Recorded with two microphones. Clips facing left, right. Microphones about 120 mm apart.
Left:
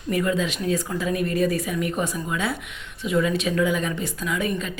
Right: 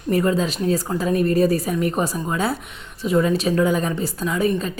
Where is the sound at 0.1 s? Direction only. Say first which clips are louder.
Right 4 dB; 35° right (ahead or behind).